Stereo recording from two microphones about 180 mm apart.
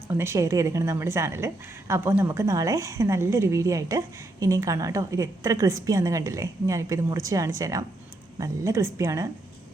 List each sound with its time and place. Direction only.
0.1 s a woman's voice: 15° right (ahead or behind)